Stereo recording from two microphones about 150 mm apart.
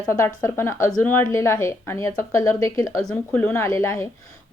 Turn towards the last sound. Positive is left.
turn(degrees=15)  # may be behind; listen again after turning